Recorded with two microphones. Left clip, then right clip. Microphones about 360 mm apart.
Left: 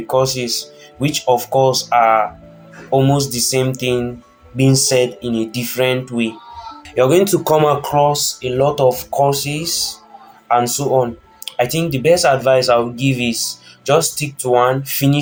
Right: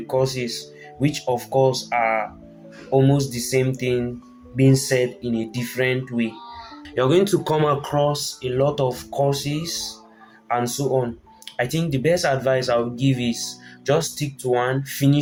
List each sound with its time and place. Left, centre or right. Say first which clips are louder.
0.1 s speech: left 6 dB; right
6.9 s speech: left 6 dB; right